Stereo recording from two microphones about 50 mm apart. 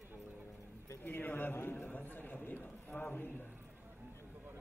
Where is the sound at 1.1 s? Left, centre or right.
Left.